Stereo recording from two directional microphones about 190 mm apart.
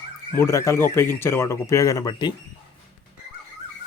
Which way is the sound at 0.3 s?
15° left (ahead or behind).